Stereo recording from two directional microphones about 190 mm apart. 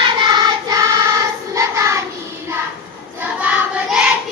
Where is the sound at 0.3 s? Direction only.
20° right (ahead or behind).